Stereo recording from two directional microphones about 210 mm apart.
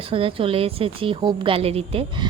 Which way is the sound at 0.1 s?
25° right (ahead or behind).